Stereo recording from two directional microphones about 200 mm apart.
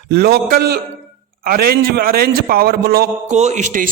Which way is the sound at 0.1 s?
55° right (ahead or behind).